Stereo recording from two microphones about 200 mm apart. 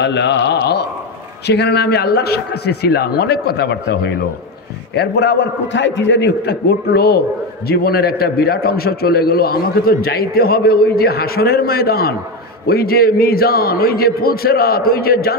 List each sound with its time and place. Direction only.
0.0 s a man's voice: 60° left (ahead or behind)